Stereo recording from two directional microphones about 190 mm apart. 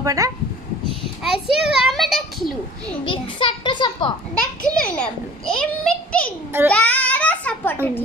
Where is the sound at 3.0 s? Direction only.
25° left (ahead or behind).